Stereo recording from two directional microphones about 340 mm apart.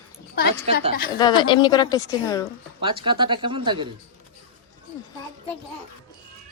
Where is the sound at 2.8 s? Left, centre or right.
Centre.